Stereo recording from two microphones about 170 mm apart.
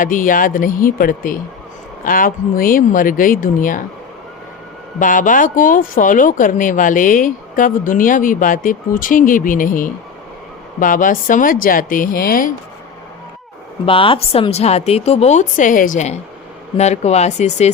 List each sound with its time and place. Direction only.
0.0 s speech: 50° left (ahead or behind)
4.9 s speech: 50° left (ahead or behind)
13.8 s speech: 30° left (ahead or behind)